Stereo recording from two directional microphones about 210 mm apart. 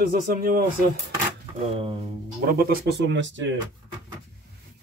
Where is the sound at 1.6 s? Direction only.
30° right (ahead or behind).